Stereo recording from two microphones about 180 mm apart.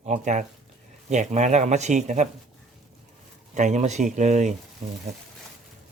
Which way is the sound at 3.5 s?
40° right (ahead or behind).